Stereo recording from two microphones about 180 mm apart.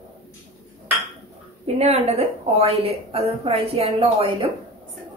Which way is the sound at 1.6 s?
35° right (ahead or behind).